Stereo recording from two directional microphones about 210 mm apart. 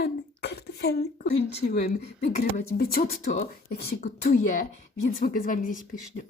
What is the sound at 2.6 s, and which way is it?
A woman's voice, 45° left (ahead or behind).